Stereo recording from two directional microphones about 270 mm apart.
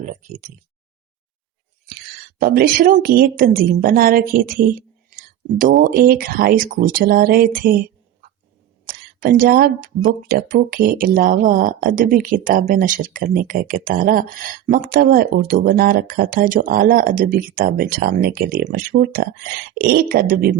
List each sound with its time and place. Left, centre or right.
0.0 s speech: right
2.4 s speech: right
8.9 s speech: right